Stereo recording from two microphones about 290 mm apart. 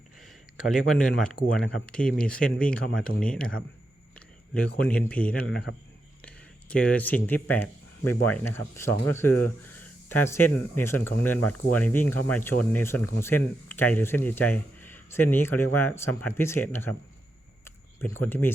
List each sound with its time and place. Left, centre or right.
0.7 s speech: centre
4.9 s speech: centre
18.0 s speech: centre